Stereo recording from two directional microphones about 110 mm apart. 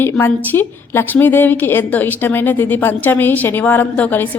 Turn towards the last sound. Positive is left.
turn(degrees=15)  # may be behind; listen again after turning